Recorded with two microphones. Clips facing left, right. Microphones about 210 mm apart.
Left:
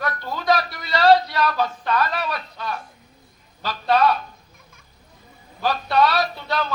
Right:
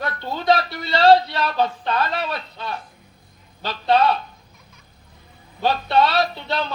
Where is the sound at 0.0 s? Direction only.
25° right (ahead or behind).